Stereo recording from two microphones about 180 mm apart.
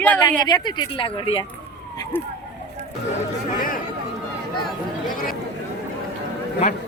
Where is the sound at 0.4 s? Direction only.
25° left (ahead or behind).